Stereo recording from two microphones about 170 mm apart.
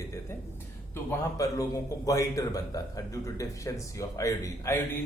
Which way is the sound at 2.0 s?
20° left (ahead or behind).